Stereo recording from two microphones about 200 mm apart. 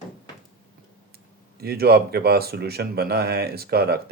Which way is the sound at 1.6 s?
50° right (ahead or behind).